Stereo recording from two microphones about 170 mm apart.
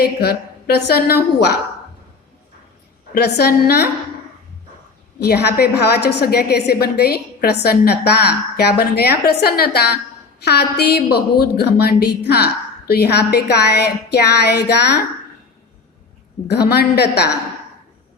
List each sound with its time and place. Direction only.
0.0 s a woman's voice: 70° left (ahead or behind)
3.2 s a woman's voice: 75° left (ahead or behind)
5.2 s a woman's voice: 75° left (ahead or behind)
16.5 s a woman's voice: 70° left (ahead or behind)